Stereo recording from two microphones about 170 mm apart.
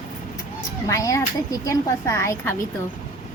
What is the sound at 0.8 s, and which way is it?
A woman's voice, 20° left (ahead or behind).